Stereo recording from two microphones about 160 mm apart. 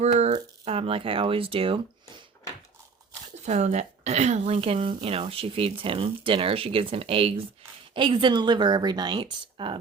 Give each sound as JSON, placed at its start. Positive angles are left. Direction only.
{"t": 0.0, "sound": "speech", "side_deg": -45}
{"t": 3.4, "sound": "speech", "side_deg": -45}